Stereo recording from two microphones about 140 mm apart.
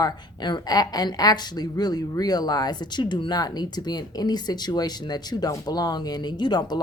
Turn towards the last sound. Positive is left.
turn(degrees=30)  # may be behind; listen again after turning